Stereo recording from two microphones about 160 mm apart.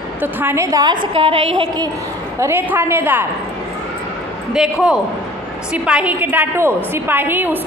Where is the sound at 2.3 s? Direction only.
15° right (ahead or behind).